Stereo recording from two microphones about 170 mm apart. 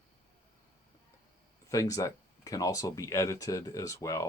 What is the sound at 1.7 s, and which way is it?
Speech, 20° left (ahead or behind).